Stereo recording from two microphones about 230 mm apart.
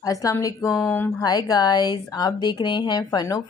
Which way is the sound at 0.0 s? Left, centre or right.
Centre.